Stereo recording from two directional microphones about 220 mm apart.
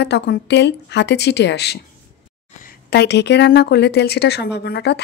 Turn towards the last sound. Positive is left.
turn(degrees=50)  # may be behind; listen again after turning